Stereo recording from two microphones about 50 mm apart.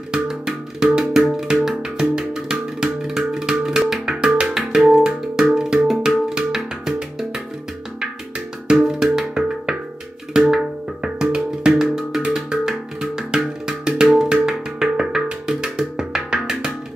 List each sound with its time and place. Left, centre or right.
0.1 s music: centre
8.8 s music: centre